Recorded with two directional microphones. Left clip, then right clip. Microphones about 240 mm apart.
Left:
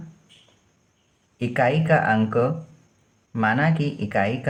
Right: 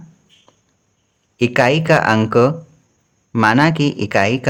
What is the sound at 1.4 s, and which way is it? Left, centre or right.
Speech, right.